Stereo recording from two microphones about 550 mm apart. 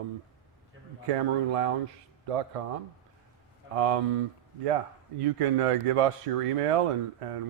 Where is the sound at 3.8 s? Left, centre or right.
Right.